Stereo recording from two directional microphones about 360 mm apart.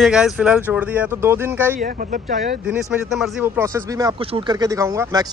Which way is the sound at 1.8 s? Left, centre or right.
Right.